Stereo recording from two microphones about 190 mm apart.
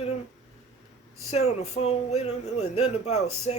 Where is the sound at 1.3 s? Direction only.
35° left (ahead or behind).